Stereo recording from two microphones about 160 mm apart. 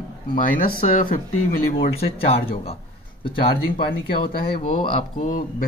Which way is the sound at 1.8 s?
35° left (ahead or behind).